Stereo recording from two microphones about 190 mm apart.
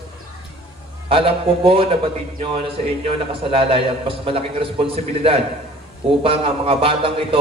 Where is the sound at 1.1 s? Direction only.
30° right (ahead or behind).